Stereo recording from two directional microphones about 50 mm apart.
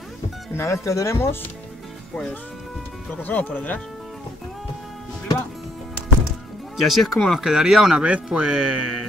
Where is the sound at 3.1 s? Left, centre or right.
Left.